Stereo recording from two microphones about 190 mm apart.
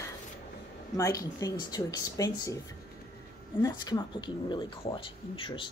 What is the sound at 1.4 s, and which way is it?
Speech, 20° left (ahead or behind).